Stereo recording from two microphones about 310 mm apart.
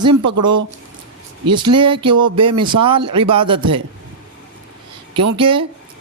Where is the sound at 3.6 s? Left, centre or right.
Right.